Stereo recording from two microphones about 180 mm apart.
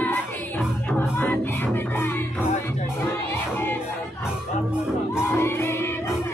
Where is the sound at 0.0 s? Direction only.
10° left (ahead or behind).